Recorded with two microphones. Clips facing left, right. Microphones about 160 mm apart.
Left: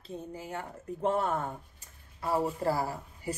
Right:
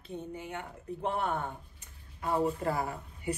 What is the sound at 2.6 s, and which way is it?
Speech, 30° left (ahead or behind).